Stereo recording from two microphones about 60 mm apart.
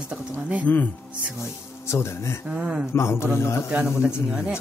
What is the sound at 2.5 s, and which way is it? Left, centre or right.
Speech, centre.